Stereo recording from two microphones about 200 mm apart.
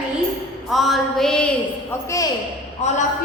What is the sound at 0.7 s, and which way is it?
Speech, centre (ahead or behind).